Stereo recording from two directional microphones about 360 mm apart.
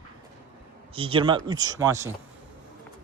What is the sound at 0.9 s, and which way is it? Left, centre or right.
Speech, centre.